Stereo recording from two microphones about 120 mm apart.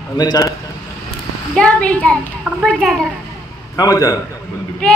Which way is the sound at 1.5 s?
10° left (ahead or behind).